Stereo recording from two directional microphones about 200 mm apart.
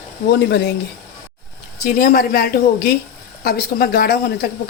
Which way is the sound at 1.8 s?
45° left (ahead or behind).